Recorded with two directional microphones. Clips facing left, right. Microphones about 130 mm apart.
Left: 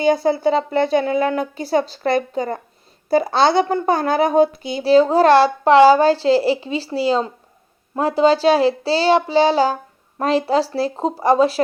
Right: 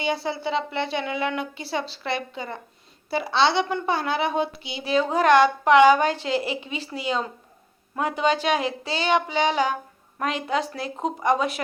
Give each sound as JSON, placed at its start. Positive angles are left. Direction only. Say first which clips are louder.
{"t": 0.0, "sound": "speech", "louder": "left 10 dB", "side_deg": 45}